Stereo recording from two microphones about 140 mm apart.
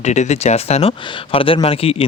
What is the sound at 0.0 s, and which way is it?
Speech, 55° left (ahead or behind).